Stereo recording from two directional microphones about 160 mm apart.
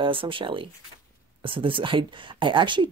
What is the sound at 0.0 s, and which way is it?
Speech, 30° right (ahead or behind).